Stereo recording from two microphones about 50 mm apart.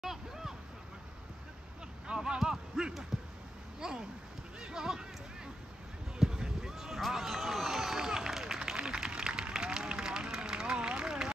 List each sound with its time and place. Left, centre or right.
0.0 s hubbub: centre
2.0 s basketball bounce: centre
3.8 s speech: centre
4.6 s music: centre
6.1 s run: centre